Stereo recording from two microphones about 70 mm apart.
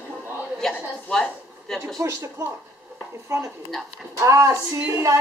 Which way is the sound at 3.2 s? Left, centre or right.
Right.